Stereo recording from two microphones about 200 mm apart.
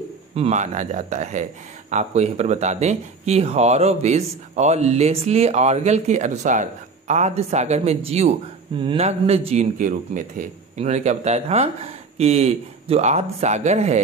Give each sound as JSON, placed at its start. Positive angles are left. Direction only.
{"t": 0.4, "sound": "speech", "side_deg": -35}